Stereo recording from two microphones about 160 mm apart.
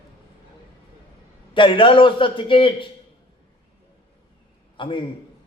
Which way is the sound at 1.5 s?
30° left (ahead or behind).